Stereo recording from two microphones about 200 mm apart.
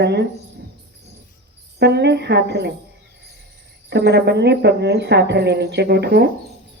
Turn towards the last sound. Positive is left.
turn(degrees=-55)  # may be behind; listen again after turning